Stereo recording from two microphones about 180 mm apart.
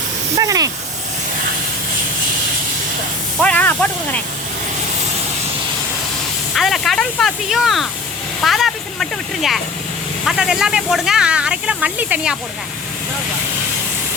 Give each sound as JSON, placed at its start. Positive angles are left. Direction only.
{"t": 0.3, "sound": "snake", "side_deg": -20}
{"t": 3.4, "sound": "speech", "side_deg": 10}
{"t": 6.5, "sound": "speech", "side_deg": 0}